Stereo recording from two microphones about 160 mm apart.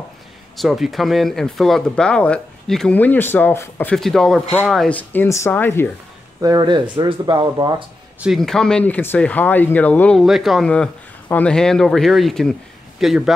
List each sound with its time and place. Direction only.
0.6 s speech: centre (ahead or behind); by 5.9 s 15° left (ahead or behind)
6.4 s speech: 25° right (ahead or behind)
8.2 s speech: centre (ahead or behind)